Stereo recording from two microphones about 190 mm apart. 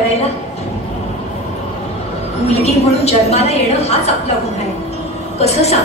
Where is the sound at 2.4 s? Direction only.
35° left (ahead or behind).